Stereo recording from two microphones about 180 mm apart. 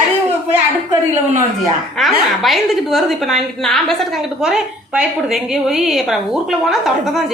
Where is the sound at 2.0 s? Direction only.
Centre (ahead or behind).